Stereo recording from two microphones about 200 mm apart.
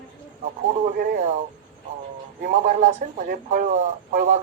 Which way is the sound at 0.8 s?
40° right (ahead or behind).